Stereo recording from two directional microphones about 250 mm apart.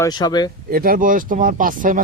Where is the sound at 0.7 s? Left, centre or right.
Right.